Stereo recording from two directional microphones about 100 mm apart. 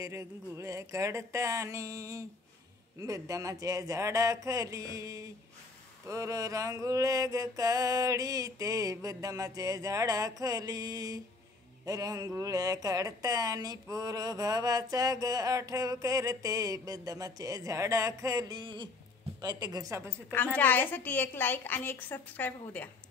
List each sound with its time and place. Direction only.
0.0 s speech: 30° right (ahead or behind)
20.5 s a woman's voice: 20° left (ahead or behind)